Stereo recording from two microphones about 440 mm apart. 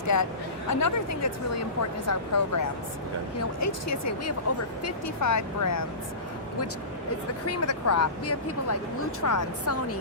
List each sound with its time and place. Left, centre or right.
0.1 s speech: left
7.4 s speech: left